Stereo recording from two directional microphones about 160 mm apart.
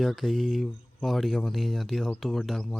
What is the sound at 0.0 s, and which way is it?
Speech, centre (ahead or behind).